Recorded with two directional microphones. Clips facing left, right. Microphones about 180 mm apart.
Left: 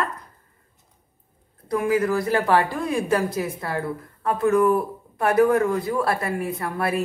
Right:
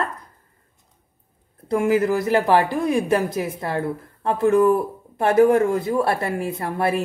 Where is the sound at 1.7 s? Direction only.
25° right (ahead or behind).